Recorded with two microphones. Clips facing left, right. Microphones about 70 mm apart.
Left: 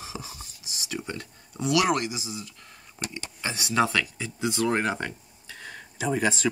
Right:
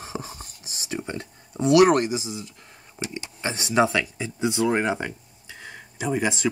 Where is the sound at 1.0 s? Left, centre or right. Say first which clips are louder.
Right 3 dB; right.